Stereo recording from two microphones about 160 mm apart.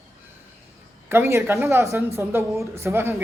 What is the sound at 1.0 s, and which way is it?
A man's voice, 15° right (ahead or behind).